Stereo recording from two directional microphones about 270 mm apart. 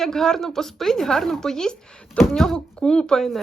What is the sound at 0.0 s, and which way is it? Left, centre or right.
A woman's voice, centre.